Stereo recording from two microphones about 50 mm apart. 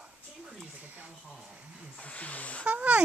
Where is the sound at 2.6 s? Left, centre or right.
Right.